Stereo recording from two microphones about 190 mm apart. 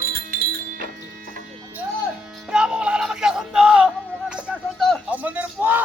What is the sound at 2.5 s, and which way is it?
Music, 5° right (ahead or behind).